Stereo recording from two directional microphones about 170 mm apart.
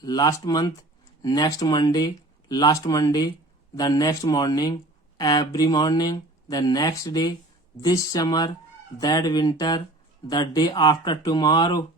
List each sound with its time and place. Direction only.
0.0 s speech: 20° left (ahead or behind)